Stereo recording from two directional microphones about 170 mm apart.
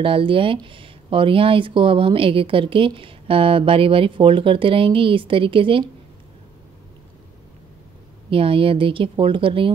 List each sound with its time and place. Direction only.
0.0 s speech: 30° right (ahead or behind)
8.3 s speech: 30° right (ahead or behind)